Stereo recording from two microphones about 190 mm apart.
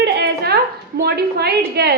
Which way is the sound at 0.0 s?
60° right (ahead or behind).